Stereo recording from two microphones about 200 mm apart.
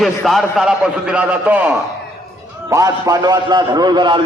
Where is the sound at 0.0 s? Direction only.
Centre (ahead or behind).